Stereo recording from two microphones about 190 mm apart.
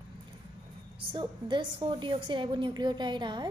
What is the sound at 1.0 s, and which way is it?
A woman's voice, 25° right (ahead or behind).